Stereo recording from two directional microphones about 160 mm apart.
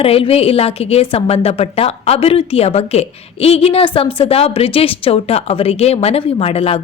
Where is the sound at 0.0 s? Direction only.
35° left (ahead or behind).